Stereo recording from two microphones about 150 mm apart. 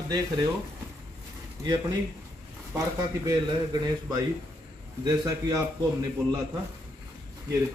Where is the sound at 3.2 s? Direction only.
25° right (ahead or behind).